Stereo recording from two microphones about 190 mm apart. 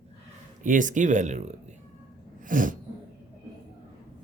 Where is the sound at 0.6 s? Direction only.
45° right (ahead or behind).